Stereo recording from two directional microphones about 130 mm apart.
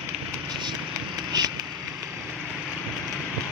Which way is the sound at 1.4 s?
30° right (ahead or behind).